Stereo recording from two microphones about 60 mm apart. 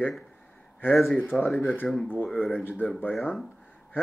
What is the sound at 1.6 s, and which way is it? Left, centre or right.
Speech, left.